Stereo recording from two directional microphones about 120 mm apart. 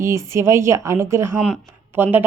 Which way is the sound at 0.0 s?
25° right (ahead or behind).